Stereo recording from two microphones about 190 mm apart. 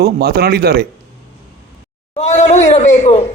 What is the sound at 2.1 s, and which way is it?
Speech, 35° left (ahead or behind).